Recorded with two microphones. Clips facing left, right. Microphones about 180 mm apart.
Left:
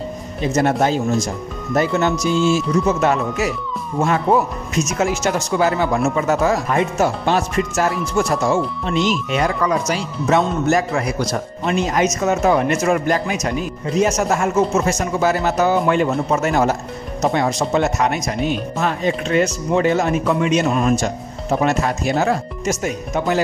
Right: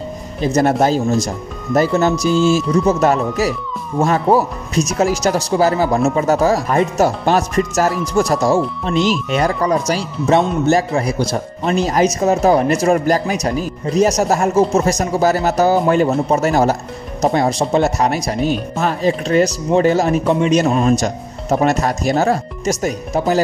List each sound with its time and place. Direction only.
0.6 s speech: 40° right (ahead or behind)